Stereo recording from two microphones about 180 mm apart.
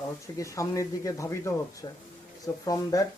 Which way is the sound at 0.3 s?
15° left (ahead or behind).